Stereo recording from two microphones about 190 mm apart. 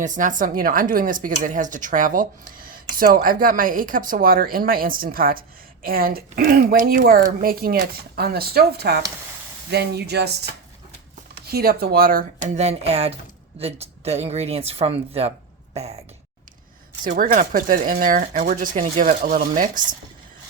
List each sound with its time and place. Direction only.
0.0 s a woman's voice: 45° right (ahead or behind); by 10.3 s 60° right (ahead or behind)
11.4 s a woman's voice: 55° right (ahead or behind)
12.5 s speech: 35° right (ahead or behind)
17.0 s a woman's voice: 45° right (ahead or behind)